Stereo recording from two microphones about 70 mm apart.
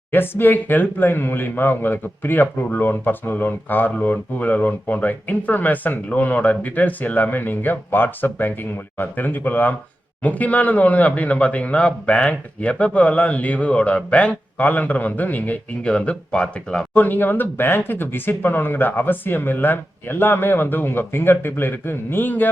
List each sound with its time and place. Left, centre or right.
0.1 s speech: left; by 16.8 s centre
16.9 s speech: left